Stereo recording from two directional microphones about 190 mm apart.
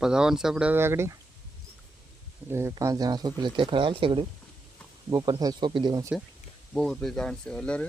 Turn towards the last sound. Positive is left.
turn(degrees=5)  # may be behind; listen again after turning